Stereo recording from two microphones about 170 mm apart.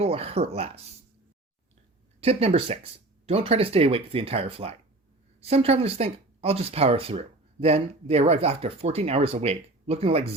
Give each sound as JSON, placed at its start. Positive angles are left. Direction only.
{"t": 0.0, "sound": "speech", "side_deg": -35}
{"t": 2.2, "sound": "speech", "side_deg": -35}